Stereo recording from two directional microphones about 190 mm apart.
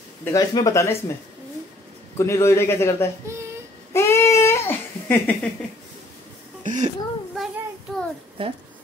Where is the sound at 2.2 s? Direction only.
15° left (ahead or behind).